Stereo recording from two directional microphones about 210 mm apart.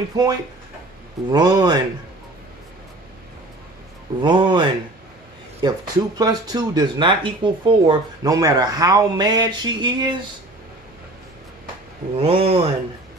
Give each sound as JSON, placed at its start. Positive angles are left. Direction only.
{"t": 0.1, "sound": "speech", "side_deg": -20}
{"t": 4.2, "sound": "speech", "side_deg": -20}
{"t": 12.2, "sound": "speech", "side_deg": -25}